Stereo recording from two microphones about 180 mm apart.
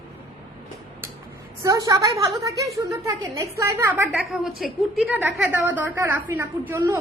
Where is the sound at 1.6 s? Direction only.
20° right (ahead or behind).